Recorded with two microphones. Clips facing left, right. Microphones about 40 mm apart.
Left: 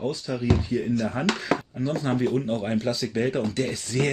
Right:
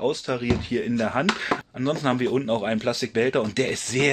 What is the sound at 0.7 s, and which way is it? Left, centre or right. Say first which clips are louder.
Speech: right 1 dB; right.